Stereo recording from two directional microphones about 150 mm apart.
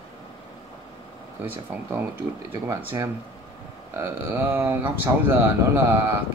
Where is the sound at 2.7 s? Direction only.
15° right (ahead or behind).